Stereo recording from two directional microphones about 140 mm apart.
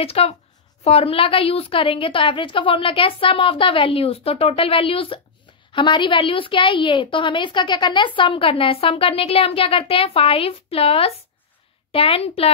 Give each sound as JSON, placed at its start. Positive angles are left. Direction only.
{"t": 0.0, "sound": "a woman's voice", "side_deg": 45}